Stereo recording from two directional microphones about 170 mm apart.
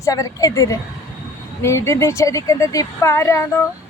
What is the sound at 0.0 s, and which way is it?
A woman's voice, 20° left (ahead or behind).